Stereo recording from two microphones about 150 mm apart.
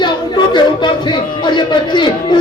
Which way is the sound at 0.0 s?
30° left (ahead or behind).